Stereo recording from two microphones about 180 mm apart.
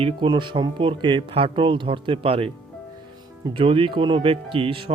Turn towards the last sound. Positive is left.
turn(degrees=-30)  # may be behind; listen again after turning